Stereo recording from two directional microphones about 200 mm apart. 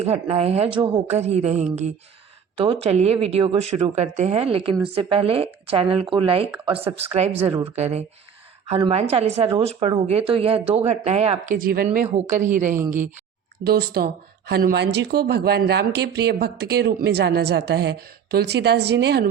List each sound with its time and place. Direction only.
0.0 s speech: 30° right (ahead or behind)
13.7 s speech: 50° right (ahead or behind)